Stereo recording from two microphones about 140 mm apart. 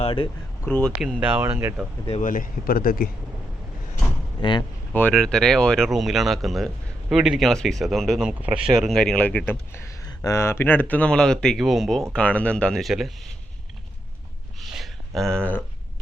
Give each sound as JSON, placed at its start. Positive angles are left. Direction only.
{"t": 0.0, "sound": "speech", "side_deg": 40}
{"t": 0.6, "sound": "speech", "side_deg": 10}
{"t": 1.4, "sound": "speech", "side_deg": -15}
{"t": 2.2, "sound": "speech", "side_deg": 80}
{"t": 4.4, "sound": "speech", "side_deg": 35}
{"t": 4.9, "sound": "speech", "side_deg": 5}
{"t": 14.6, "sound": "a sound", "side_deg": 0}